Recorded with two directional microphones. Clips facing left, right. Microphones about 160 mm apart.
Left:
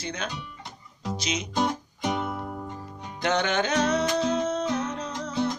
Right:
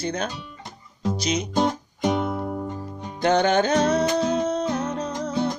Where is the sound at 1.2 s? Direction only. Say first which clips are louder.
Right 6 dB; 40° right (ahead or behind).